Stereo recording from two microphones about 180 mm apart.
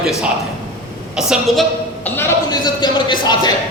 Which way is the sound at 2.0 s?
15° left (ahead or behind).